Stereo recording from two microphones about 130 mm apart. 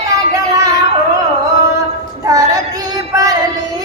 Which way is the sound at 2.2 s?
25° right (ahead or behind).